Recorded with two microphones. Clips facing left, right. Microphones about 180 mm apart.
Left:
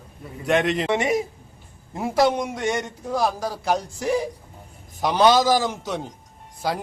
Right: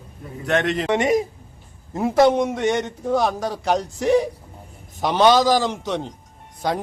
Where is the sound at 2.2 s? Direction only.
Centre (ahead or behind).